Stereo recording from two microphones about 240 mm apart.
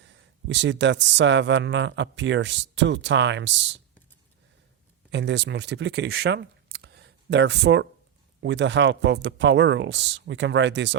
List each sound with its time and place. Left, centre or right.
0.0 s speech: right
5.1 s speech: right